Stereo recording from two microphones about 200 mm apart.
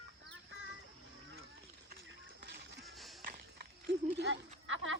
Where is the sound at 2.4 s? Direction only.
55° right (ahead or behind).